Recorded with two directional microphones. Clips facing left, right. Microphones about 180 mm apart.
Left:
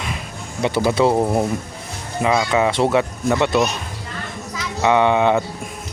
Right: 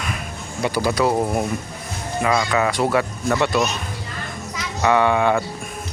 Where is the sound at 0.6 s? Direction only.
25° left (ahead or behind).